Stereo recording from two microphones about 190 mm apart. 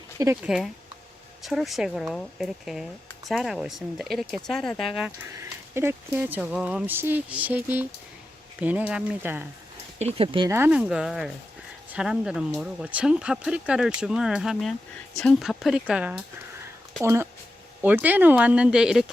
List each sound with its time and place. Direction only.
0.4 s speech: 5° right (ahead or behind)
5.4 s speech: 10° right (ahead or behind)
10.0 s speech: 30° right (ahead or behind)
10.5 s speech: 10° right (ahead or behind)